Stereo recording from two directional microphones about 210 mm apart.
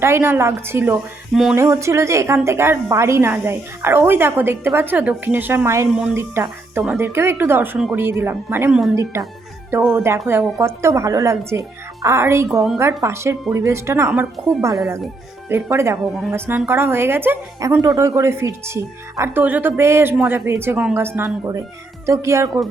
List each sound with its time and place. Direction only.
0.0 s a woman's voice: 10° right (ahead or behind)
9.8 s a woman's voice: 10° right (ahead or behind)
15.4 s a woman's voice: 10° right (ahead or behind)